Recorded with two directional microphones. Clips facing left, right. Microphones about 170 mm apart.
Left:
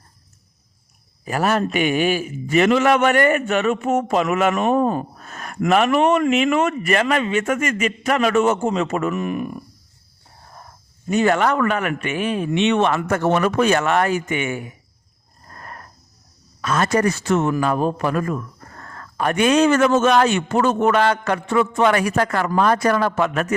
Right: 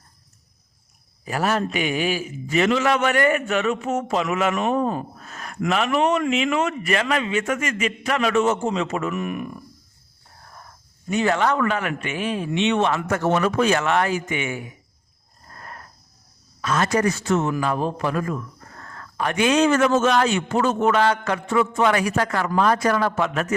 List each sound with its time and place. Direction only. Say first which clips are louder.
1.2 s a man's voice: left 3 dB; 50° left (ahead or behind); by 9.6 s 30° left (ahead or behind)
11.1 s a man's voice: left 3 dB; 50° left (ahead or behind)
16.6 s a man's voice: left 2 dB; 55° left (ahead or behind)
17.5 s a man's voice: left 4 dB; 50° left (ahead or behind)
18.8 s a man's voice: left 3 dB; 45° left (ahead or behind)